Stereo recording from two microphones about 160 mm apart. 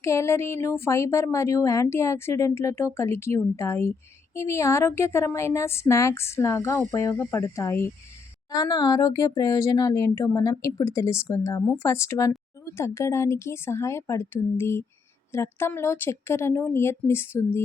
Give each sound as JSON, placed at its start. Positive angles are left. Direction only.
{"t": 0.0, "sound": "speech", "side_deg": 15}